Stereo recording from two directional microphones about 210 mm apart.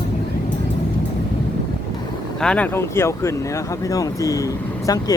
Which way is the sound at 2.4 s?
5° left (ahead or behind).